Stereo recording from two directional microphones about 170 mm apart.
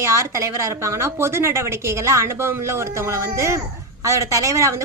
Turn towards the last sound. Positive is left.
turn(degrees=-20)  # may be behind; listen again after turning